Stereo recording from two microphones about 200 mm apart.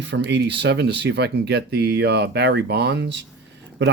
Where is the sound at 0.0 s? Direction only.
60° right (ahead or behind).